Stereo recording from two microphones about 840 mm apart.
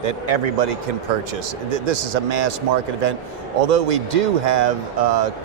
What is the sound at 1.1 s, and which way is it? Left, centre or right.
Speech, right.